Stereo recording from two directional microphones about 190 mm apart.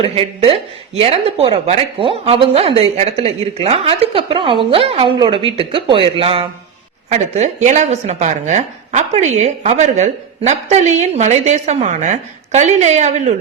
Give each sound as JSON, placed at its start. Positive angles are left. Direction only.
{"t": 0.0, "sound": "a woman's voice", "side_deg": -30}